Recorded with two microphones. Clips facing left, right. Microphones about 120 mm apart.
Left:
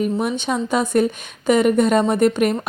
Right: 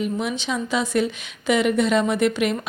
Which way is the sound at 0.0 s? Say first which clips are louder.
Left 4 dB; 45° left (ahead or behind).